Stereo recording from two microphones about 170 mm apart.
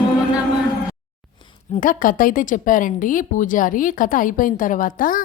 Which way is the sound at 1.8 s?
55° left (ahead or behind).